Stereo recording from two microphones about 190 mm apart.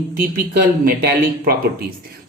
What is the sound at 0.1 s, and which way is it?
Speech, 50° right (ahead or behind).